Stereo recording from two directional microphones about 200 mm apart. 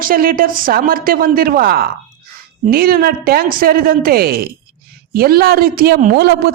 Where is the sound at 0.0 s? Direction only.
45° right (ahead or behind).